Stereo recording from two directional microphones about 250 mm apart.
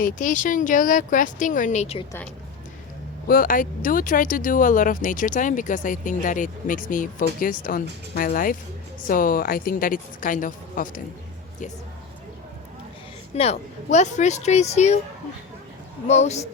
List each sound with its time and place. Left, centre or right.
0.0 s speech: left
3.2 s speech: left
13.3 s speech: left
16.0 s speech: left